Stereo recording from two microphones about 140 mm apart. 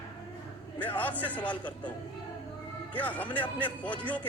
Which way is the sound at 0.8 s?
10° left (ahead or behind).